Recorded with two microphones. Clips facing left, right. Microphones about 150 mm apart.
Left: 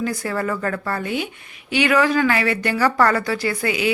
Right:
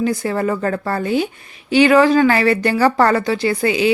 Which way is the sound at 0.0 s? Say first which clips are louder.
Right 5 dB; 25° right (ahead or behind).